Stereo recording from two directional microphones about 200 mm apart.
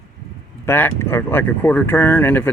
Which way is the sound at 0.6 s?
10° left (ahead or behind).